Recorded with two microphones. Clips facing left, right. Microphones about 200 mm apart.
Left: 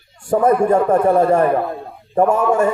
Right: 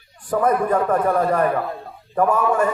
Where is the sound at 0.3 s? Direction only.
25° left (ahead or behind).